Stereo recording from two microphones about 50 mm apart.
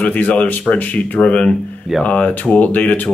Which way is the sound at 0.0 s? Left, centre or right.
Left.